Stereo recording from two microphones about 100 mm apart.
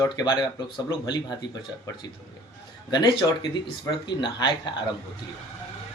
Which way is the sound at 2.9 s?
50° left (ahead or behind).